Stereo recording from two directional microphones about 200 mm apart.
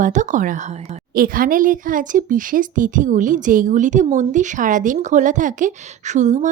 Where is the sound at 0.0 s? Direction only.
40° right (ahead or behind).